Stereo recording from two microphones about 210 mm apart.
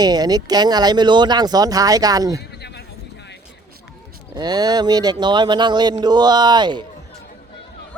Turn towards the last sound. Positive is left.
turn(degrees=-20)  # may be behind; listen again after turning